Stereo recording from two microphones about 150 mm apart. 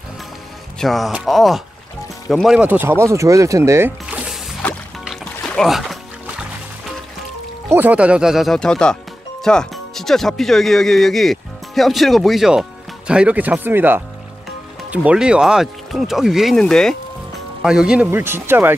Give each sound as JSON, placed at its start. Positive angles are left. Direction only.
{"t": 0.7, "sound": "speech", "side_deg": 0}
{"t": 4.0, "sound": "music", "side_deg": -5}
{"t": 7.7, "sound": "speech", "side_deg": -10}